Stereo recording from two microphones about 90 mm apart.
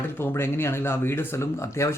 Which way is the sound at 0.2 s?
30° left (ahead or behind).